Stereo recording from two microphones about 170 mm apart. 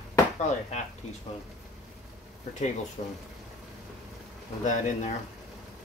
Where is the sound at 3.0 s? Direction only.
45° left (ahead or behind).